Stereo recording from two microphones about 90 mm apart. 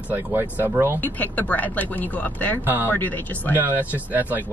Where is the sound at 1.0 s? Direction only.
20° left (ahead or behind).